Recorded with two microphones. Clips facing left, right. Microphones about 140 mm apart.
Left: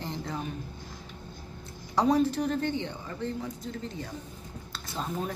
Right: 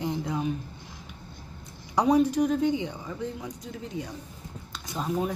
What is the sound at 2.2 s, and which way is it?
Speech, 10° right (ahead or behind).